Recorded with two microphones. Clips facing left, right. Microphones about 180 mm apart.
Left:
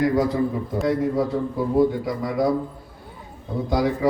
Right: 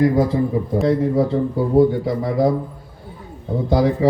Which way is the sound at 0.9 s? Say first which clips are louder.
Right 3 dB; 25° right (ahead or behind).